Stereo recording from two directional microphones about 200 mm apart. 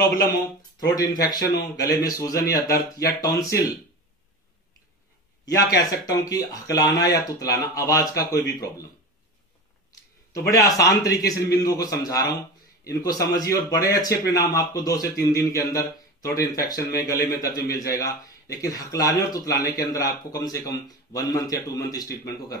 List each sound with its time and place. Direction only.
0.7 s speech: 20° left (ahead or behind)
5.4 s speech: 20° left (ahead or behind)
10.5 s speech: 15° left (ahead or behind)